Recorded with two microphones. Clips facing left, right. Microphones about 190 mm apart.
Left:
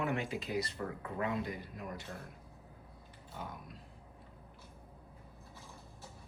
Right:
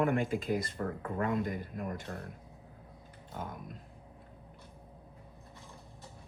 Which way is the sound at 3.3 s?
50° right (ahead or behind).